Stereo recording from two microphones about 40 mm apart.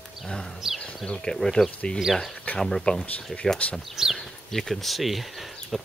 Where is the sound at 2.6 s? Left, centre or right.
Centre.